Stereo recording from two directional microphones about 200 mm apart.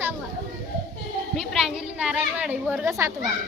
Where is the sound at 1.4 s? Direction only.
Centre (ahead or behind).